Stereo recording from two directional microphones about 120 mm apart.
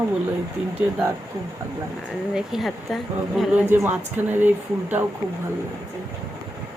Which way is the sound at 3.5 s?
15° right (ahead or behind).